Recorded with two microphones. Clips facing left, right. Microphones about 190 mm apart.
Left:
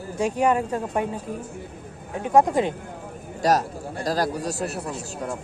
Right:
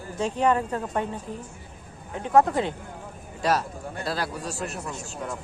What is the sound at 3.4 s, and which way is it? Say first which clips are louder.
Speech: left 4 dB; 40° left (ahead or behind).